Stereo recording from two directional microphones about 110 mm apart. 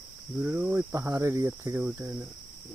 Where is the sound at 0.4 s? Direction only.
15° right (ahead or behind).